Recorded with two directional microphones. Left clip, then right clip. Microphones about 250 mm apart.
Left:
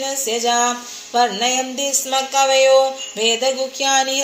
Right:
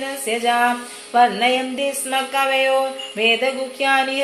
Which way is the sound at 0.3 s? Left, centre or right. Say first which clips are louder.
Right 1 dB; left.